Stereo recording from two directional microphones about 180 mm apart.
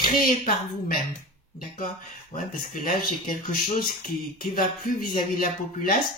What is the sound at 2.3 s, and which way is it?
Speech, 45° left (ahead or behind).